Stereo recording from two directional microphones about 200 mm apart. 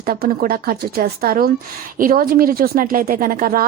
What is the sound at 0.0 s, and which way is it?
A woman's voice, 50° right (ahead or behind).